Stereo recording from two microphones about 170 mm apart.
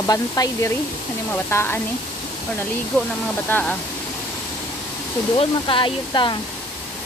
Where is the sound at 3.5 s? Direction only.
10° left (ahead or behind).